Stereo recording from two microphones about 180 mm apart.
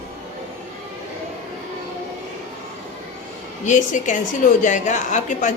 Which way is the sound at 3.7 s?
45° left (ahead or behind).